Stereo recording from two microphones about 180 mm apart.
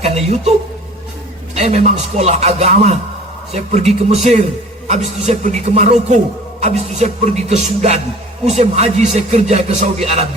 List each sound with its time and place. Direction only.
0.0 s a man's voice: 35° right (ahead or behind)
1.5 s a man's voice: 35° right (ahead or behind)